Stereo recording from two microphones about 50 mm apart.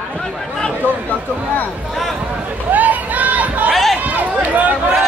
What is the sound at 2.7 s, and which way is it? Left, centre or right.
Chatter, right.